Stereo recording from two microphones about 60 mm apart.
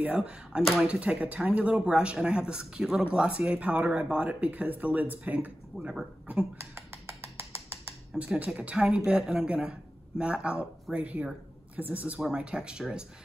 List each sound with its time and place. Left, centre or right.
0.0 s speech: right
0.6 s speech: centre
0.8 s speech: centre
6.6 s a sound: right
8.2 s a woman's voice: right
12.3 s a woman's voice: centre